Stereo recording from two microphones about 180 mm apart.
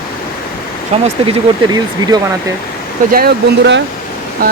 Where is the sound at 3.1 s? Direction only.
70° right (ahead or behind).